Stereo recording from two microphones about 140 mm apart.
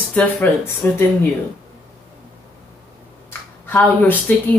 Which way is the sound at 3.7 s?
10° left (ahead or behind).